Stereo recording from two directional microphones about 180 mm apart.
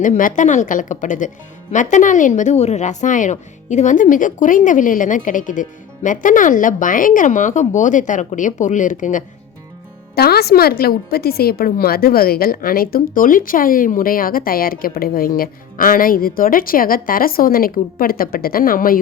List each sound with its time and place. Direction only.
0.0 s a woman's voice: 45° left (ahead or behind)
10.2 s a woman's voice: 60° left (ahead or behind)